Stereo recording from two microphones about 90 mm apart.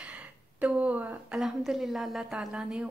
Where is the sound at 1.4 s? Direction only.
5° right (ahead or behind).